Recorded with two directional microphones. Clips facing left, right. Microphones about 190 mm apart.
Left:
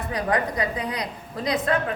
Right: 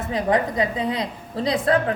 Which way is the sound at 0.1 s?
25° right (ahead or behind).